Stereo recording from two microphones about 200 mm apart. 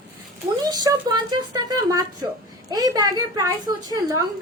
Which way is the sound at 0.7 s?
20° right (ahead or behind).